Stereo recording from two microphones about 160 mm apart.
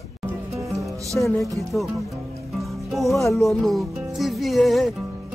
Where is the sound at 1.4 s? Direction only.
Centre (ahead or behind).